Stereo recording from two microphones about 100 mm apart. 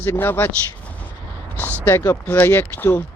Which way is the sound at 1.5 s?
20° left (ahead or behind).